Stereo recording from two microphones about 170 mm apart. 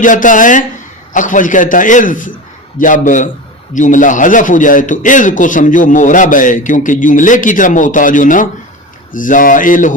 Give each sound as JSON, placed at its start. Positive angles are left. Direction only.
{"t": 0.0, "sound": "a man's voice", "side_deg": 50}